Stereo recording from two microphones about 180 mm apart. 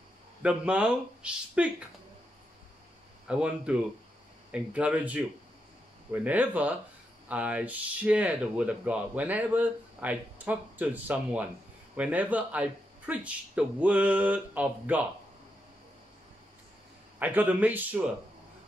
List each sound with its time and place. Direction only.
0.4 s speech: 5° right (ahead or behind)
3.3 s speech: 5° right (ahead or behind)
6.2 s speech: 10° right (ahead or behind)
17.2 s speech: 10° right (ahead or behind)